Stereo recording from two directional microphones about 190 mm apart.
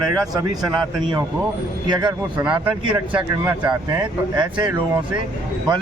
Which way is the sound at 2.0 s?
20° right (ahead or behind).